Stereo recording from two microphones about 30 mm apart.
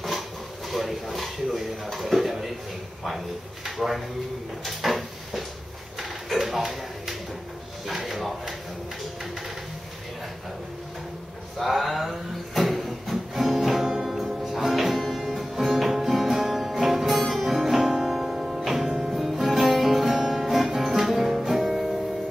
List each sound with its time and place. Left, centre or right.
0.7 s speech: centre
3.7 s speech: centre
4.6 s a sound: centre
11.5 s a sound: centre
14.0 s music: centre
17.2 s music: centre
17.7 s music: centre